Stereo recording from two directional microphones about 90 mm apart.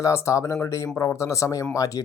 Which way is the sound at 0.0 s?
35° left (ahead or behind).